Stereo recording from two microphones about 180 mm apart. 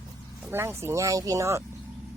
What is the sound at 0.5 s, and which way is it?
Speech, 15° right (ahead or behind).